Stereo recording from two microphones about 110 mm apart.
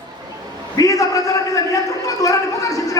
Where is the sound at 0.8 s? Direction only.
30° left (ahead or behind).